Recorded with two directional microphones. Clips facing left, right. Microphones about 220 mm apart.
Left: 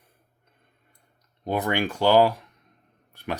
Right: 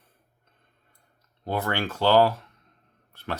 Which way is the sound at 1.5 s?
15° left (ahead or behind).